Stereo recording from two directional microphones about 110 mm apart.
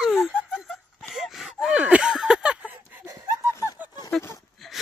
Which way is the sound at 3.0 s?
25° right (ahead or behind).